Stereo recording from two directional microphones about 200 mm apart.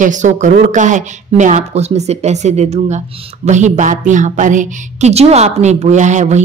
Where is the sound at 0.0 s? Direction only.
40° right (ahead or behind).